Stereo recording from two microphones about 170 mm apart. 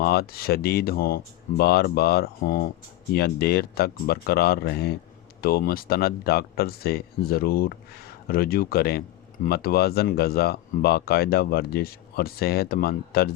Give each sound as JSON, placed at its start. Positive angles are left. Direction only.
{"t": 0.0, "sound": "speech", "side_deg": 70}